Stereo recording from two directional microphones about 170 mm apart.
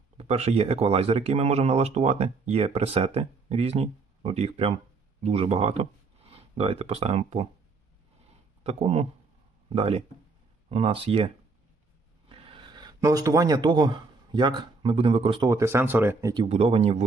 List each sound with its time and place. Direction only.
0.2 s speech: 35° right (ahead or behind)
8.6 s speech: 40° right (ahead or behind)
12.3 s a sound: 30° right (ahead or behind)
14.3 s speech: 25° right (ahead or behind)
15.4 s speech: 15° right (ahead or behind)
16.5 s speech: 35° right (ahead or behind)